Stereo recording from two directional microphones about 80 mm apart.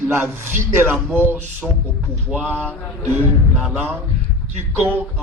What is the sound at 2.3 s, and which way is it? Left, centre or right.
Speech, centre.